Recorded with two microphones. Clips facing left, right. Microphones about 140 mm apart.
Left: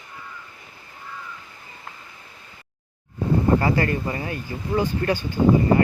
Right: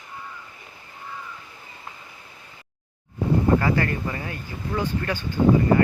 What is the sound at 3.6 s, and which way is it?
Speech, 30° left (ahead or behind).